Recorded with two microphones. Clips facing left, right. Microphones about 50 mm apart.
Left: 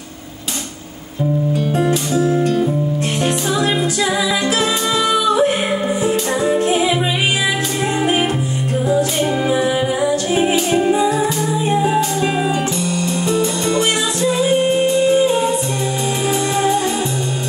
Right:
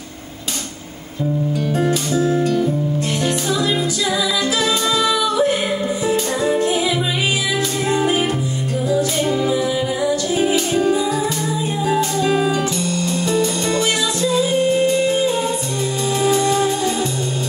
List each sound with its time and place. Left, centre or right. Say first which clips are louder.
1.8 s music: left 1 dB; left